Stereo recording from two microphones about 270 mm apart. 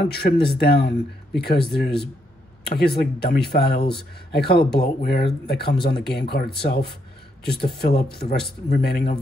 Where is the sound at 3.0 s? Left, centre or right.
Left.